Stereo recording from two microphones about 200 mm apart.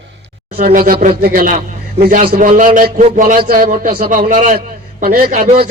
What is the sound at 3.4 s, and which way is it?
A man's voice, 45° right (ahead or behind).